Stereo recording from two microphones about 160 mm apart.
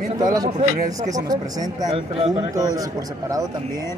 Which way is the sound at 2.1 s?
40° right (ahead or behind).